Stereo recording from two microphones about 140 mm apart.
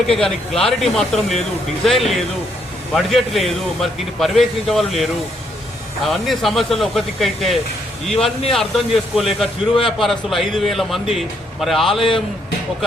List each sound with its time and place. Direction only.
0.1 s a man's voice: centre (ahead or behind)
6.1 s a man's voice: centre (ahead or behind)
8.2 s a man's voice: 45° left (ahead or behind)
8.5 s a man's voice: centre (ahead or behind)